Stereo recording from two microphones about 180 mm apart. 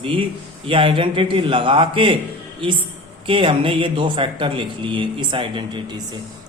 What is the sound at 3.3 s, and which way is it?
Speech, 30° right (ahead or behind).